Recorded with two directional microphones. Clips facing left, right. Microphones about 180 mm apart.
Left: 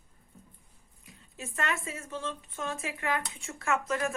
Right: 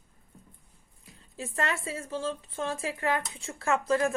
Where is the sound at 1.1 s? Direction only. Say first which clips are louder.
Right 4 dB; 35° right (ahead or behind).